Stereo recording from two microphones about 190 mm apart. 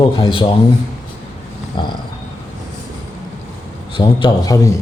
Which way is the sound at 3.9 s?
25° left (ahead or behind).